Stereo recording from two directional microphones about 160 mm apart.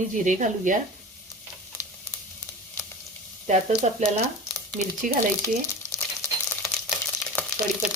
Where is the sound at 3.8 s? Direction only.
45° right (ahead or behind).